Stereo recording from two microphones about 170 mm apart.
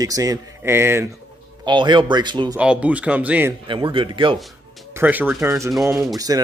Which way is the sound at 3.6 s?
30° right (ahead or behind).